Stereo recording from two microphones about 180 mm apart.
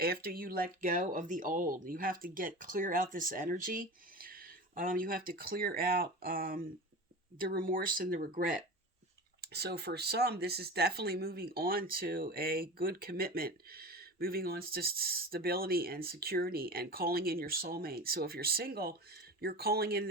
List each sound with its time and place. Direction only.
0.0 s speech: 55° right (ahead or behind)
9.4 s speech: 60° right (ahead or behind)